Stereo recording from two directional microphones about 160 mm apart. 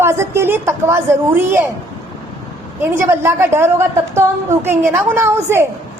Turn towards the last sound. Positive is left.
turn(degrees=-15)  # may be behind; listen again after turning